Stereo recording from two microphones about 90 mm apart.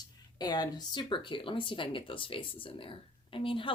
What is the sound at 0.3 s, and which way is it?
A woman's voice, 50° left (ahead or behind).